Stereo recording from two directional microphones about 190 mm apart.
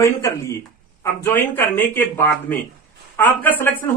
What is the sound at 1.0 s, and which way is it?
Speech, 10° left (ahead or behind).